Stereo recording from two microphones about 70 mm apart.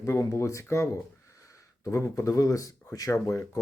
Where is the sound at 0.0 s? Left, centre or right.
Left.